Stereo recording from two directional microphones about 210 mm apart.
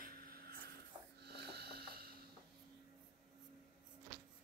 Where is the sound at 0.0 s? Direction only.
45° right (ahead or behind).